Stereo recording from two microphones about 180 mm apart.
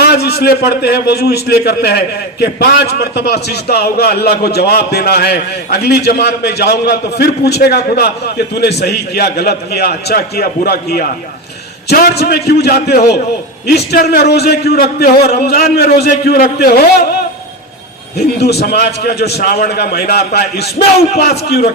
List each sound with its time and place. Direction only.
0.0 s a man's voice: 60° left (ahead or behind)
18.3 s a man's voice: 65° left (ahead or behind)